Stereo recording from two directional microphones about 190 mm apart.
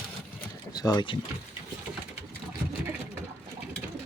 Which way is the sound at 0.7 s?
20° left (ahead or behind).